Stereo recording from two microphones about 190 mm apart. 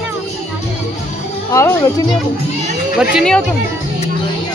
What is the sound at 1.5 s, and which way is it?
Speech, 15° left (ahead or behind).